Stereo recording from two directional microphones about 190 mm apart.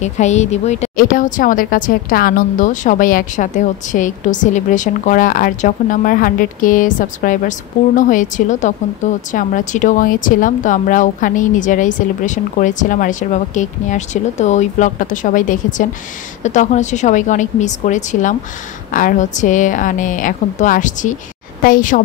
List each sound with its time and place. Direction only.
0.0 s a woman's voice: 35° left (ahead or behind)